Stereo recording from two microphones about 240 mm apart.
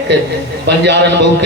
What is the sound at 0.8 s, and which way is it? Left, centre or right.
Speech, right.